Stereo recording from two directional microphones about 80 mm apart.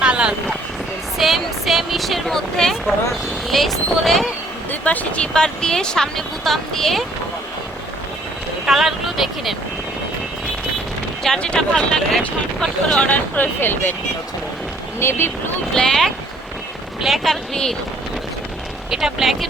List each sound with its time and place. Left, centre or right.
0.0 s vehicle: centre
1.2 s speech: centre
4.7 s speech: centre
8.6 s speech: centre
11.2 s speech: centre
13.0 s speech: left
14.9 s speech: left
15.7 s speech: centre
18.9 s speech: centre